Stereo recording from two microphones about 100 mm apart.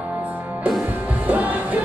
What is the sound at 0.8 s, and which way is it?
Music, 15° right (ahead or behind).